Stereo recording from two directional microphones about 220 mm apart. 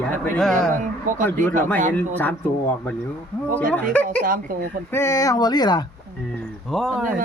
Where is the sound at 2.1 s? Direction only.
10° left (ahead or behind).